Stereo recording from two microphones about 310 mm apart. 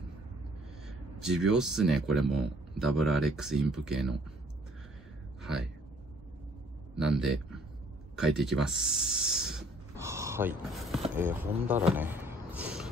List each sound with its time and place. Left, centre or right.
0.8 s speech: centre
5.4 s speech: centre
7.0 s speech: centre